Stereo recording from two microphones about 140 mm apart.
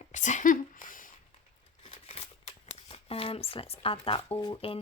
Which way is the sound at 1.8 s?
45° left (ahead or behind).